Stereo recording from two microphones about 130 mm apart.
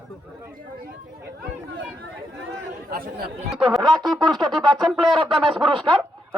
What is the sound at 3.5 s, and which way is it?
Speech, 5° right (ahead or behind).